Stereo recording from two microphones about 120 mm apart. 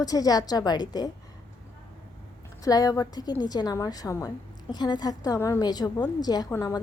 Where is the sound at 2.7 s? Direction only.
30° left (ahead or behind).